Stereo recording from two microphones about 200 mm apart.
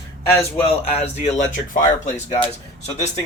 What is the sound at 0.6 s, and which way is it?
Speech, 35° left (ahead or behind).